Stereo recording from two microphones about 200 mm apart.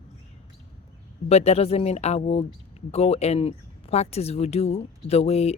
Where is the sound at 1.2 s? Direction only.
30° left (ahead or behind).